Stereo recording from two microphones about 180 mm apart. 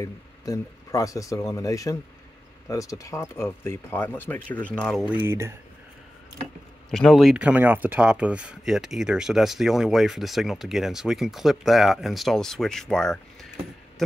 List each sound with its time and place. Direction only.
0.0 s speech: 20° left (ahead or behind)
5.0 s speech: 10° right (ahead or behind)
6.9 s speech: centre (ahead or behind)